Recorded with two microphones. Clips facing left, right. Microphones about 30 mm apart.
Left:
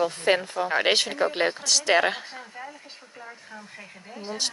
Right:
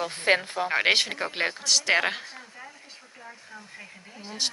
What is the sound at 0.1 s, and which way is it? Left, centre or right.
Speech, right.